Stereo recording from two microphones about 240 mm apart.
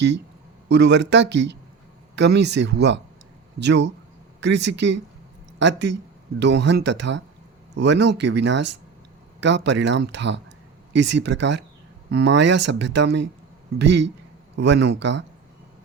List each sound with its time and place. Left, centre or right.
0.7 s speech: right